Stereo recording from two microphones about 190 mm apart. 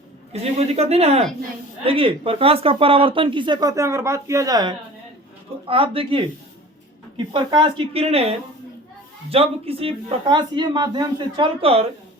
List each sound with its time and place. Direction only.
0.3 s speech: 35° right (ahead or behind)
7.3 s speech: 25° right (ahead or behind)